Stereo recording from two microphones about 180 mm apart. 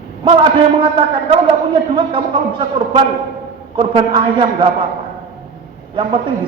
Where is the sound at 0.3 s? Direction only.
25° right (ahead or behind).